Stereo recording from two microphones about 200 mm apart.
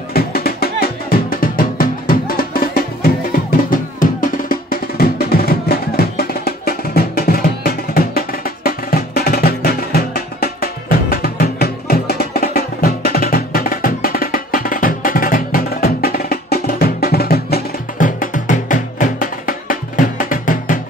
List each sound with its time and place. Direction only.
0.1 s music: 50° left (ahead or behind)